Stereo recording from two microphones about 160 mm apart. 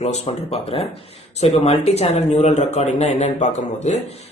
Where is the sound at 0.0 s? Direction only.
40° left (ahead or behind).